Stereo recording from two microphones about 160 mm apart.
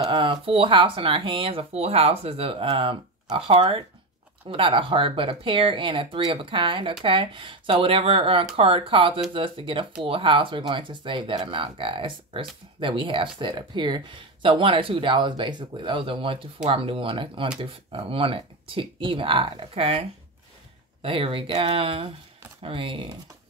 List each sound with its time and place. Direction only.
0.0 s speech: 35° right (ahead or behind)
21.0 s speech: 35° right (ahead or behind)